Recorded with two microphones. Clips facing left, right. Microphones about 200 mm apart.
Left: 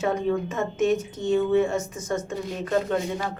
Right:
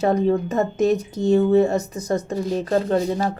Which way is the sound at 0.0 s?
40° right (ahead or behind).